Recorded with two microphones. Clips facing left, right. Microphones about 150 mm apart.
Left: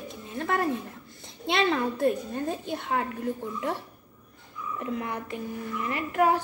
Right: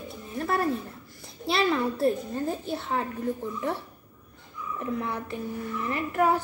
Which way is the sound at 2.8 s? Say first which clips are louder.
Left 1 dB; 60° left (ahead or behind).